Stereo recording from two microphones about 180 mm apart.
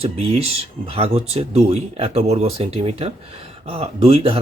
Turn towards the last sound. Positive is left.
turn(degrees=-30)  # may be behind; listen again after turning